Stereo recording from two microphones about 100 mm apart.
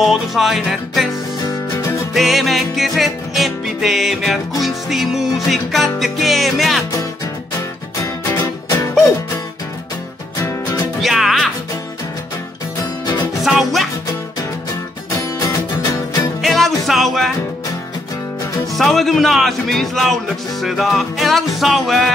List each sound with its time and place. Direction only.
0.0 s music: centre (ahead or behind)
2.1 s music: centre (ahead or behind)
8.0 s music: 35° left (ahead or behind)
11.0 s music: centre (ahead or behind)
13.4 s music: centre (ahead or behind)
15.0 s music: 40° left (ahead or behind)
16.3 s music: centre (ahead or behind)
18.8 s music: centre (ahead or behind)